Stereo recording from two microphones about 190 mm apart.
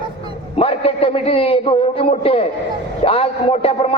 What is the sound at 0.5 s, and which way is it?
A man's voice, 30° left (ahead or behind).